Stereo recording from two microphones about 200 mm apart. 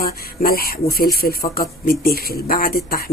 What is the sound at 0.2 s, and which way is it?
Speech, 50° left (ahead or behind).